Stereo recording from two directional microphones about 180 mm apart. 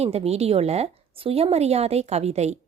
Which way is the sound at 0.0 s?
35° right (ahead or behind).